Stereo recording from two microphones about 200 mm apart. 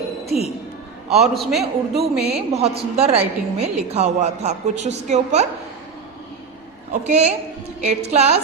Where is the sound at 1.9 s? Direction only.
55° right (ahead or behind).